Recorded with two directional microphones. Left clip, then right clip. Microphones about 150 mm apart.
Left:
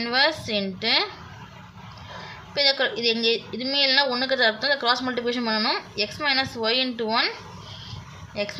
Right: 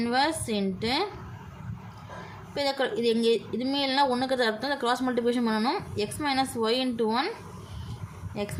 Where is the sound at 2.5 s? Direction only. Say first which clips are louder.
Left 5 dB; 20° right (ahead or behind).